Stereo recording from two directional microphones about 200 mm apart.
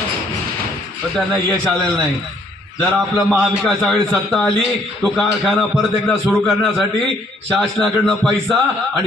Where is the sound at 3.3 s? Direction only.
Centre (ahead or behind).